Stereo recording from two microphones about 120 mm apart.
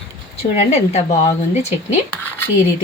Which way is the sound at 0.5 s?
65° left (ahead or behind).